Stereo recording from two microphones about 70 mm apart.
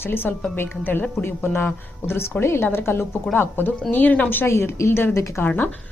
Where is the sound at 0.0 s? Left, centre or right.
Left.